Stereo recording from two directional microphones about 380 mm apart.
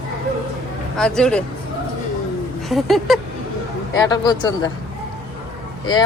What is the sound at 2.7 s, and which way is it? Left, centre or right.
Speech, centre.